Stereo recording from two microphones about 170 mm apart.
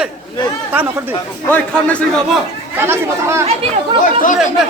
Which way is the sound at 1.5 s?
10° left (ahead or behind).